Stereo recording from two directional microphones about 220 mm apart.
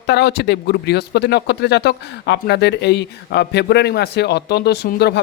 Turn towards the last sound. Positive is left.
turn(degrees=50)  # may be behind; listen again after turning